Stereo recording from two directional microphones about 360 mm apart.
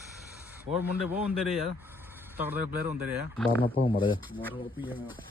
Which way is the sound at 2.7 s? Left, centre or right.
Right.